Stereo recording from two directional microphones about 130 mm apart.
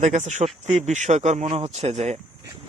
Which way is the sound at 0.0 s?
65° right (ahead or behind).